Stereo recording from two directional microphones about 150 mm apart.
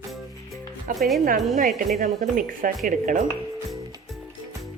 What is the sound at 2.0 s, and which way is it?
Speech, 70° right (ahead or behind).